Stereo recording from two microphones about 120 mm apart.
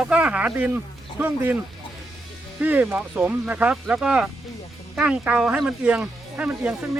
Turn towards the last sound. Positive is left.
turn(degrees=-15)  # may be behind; listen again after turning